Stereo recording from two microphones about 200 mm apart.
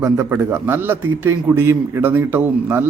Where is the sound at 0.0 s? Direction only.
10° right (ahead or behind).